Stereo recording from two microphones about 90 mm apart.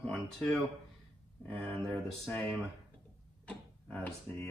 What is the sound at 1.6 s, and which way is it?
Speech, centre (ahead or behind).